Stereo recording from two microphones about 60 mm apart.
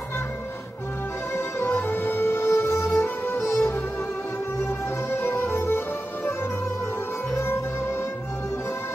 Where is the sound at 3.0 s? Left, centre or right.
Left.